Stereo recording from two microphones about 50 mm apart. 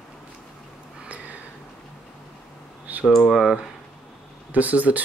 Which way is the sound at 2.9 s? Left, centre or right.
Right.